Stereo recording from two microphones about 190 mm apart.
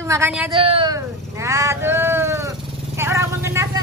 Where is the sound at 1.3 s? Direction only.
15° right (ahead or behind).